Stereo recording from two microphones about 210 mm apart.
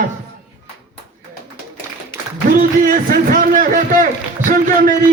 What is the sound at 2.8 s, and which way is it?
A man's voice, 40° right (ahead or behind).